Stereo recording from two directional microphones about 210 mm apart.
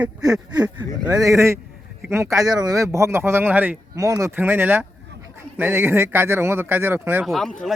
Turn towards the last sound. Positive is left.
turn(degrees=0)  # may be behind; listen again after turning